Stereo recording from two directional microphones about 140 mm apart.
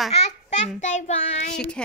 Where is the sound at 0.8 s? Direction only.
55° left (ahead or behind).